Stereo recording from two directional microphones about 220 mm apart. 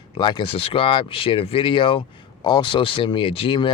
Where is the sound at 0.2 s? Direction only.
20° left (ahead or behind).